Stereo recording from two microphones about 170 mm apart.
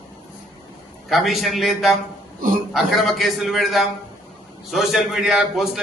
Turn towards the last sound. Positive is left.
turn(degrees=0)  # may be behind; listen again after turning